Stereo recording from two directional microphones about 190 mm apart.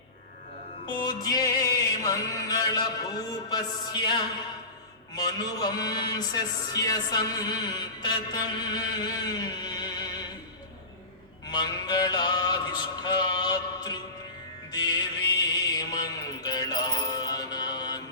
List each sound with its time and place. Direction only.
0.9 s a man's voice: 25° left (ahead or behind)
11.4 s a man's voice: 20° left (ahead or behind)
14.7 s music: 20° left (ahead or behind)
15.8 s mantra: 20° left (ahead or behind)